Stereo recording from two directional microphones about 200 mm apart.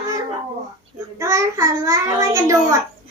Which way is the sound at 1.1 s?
15° right (ahead or behind).